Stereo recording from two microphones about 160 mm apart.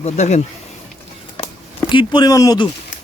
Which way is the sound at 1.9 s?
30° left (ahead or behind).